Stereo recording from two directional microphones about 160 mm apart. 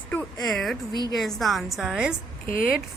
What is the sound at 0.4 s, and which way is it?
Speech, centre (ahead or behind).